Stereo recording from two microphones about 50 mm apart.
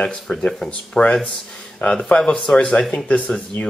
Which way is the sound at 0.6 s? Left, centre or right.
Left.